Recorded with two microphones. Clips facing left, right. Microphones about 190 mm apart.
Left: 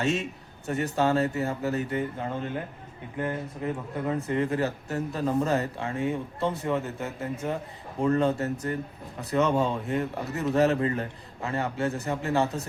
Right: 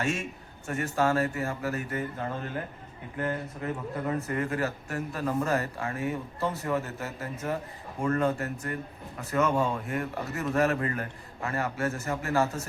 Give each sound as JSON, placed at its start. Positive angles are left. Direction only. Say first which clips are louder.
{"t": 0.0, "sound": "speech", "louder": "left 3 dB", "side_deg": 20}